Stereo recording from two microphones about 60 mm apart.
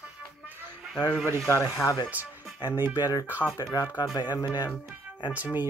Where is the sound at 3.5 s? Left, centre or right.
Left.